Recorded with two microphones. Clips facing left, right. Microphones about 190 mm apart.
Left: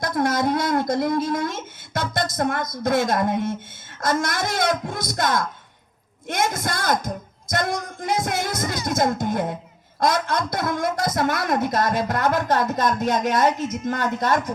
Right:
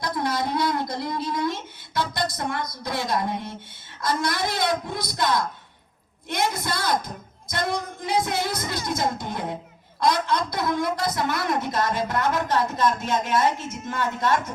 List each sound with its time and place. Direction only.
0.0 s a woman's voice: 45° left (ahead or behind)